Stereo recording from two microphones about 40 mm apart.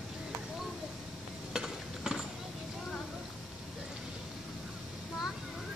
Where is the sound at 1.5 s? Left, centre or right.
Centre.